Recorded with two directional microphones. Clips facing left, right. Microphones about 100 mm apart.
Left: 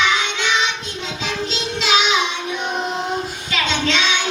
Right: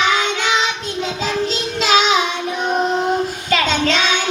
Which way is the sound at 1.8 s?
40° right (ahead or behind).